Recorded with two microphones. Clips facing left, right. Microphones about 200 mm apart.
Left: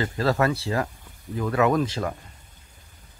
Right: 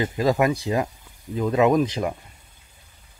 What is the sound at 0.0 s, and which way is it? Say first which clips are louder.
Speech: right 2 dB; 15° right (ahead or behind).